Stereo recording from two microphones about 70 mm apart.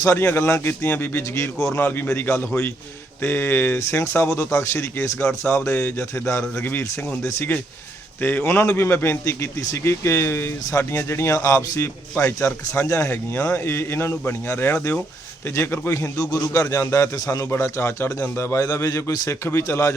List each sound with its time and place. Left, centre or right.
0.0 s a man's voice: left
0.3 s a man's voice: left
1.8 s a man's voice: left
2.0 s a man's voice: left
3.8 s a man's voice: left
8.2 s a man's voice: left
8.4 s a man's voice: left
11.3 s a man's voice: left
12.2 s a man's voice: left
12.6 s a man's voice: left
17.4 s a man's voice: left
18.6 s a man's voice: left